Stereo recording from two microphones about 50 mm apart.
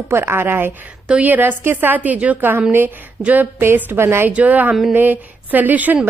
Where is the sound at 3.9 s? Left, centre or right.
Right.